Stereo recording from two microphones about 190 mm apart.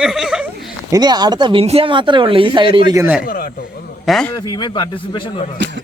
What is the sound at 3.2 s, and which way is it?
Speech, 50° left (ahead or behind).